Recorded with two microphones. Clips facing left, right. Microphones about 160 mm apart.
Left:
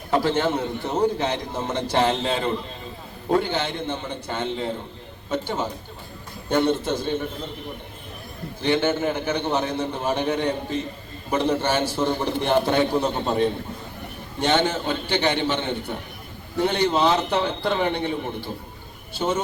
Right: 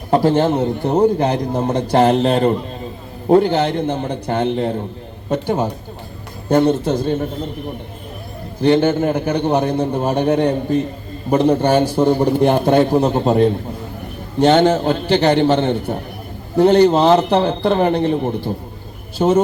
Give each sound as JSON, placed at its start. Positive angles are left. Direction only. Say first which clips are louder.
{"t": 0.1, "sound": "a man's voice", "louder": "right 7 dB", "side_deg": -40}
{"t": 8.6, "sound": "a man's voice", "louder": "right 8 dB", "side_deg": -40}